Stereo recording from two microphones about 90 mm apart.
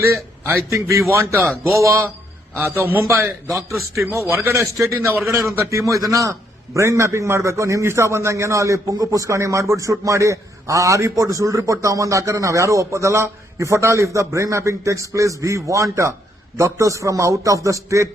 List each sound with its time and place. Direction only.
0.0 s a man's voice: 30° right (ahead or behind)
1.5 s a man's voice: centre (ahead or behind)
1.8 s a man's voice: 30° right (ahead or behind)
3.5 s a man's voice: centre (ahead or behind)
3.9 s a man's voice: 30° right (ahead or behind)
5.2 s a man's voice: centre (ahead or behind)
5.5 s a man's voice: 35° right (ahead or behind)